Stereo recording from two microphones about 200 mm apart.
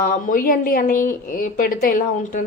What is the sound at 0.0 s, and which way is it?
A woman's voice, 45° left (ahead or behind).